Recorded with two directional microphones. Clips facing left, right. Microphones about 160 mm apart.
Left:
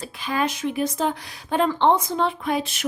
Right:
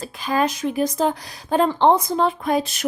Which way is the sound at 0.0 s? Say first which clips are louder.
Right 4 dB; 40° right (ahead or behind).